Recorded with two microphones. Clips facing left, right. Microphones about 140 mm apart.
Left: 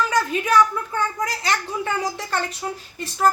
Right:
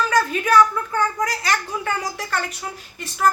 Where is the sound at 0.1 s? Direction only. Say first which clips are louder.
Right 2 dB; 20° left (ahead or behind).